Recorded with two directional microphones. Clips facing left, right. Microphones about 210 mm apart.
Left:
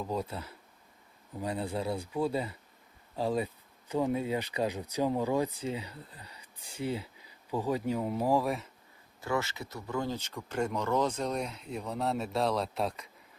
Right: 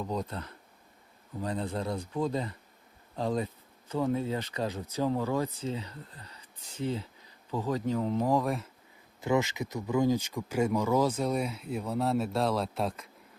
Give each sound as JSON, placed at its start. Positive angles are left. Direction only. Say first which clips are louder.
{"t": 0.0, "sound": "speech", "louder": "right 1 dB", "side_deg": 5}
{"t": 9.2, "sound": "speech", "louder": "right 5 dB", "side_deg": -15}